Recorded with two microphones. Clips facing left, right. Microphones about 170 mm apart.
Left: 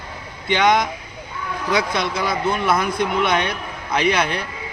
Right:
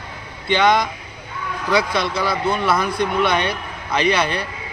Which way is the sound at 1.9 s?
15° left (ahead or behind).